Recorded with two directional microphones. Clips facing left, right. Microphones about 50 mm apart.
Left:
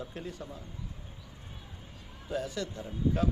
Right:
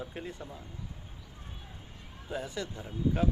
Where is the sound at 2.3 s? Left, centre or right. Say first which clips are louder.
Left 2 dB; centre.